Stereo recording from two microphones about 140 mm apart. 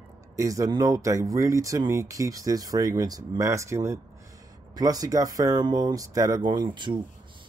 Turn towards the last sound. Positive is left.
turn(degrees=-35)  # may be behind; listen again after turning